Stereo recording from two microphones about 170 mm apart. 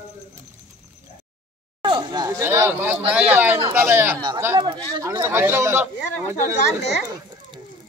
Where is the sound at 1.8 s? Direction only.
30° right (ahead or behind); by 4.1 s 10° right (ahead or behind).